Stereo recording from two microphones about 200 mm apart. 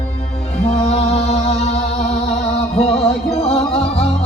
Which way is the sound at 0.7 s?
30° left (ahead or behind).